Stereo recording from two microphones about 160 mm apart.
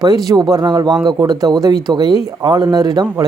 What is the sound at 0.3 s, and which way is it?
Speech, 25° right (ahead or behind).